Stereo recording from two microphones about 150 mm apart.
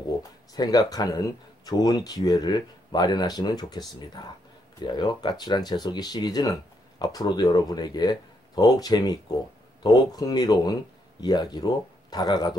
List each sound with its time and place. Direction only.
0.2 s speech: 25° left (ahead or behind)